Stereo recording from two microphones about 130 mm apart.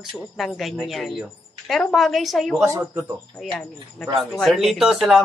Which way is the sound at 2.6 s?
20° right (ahead or behind).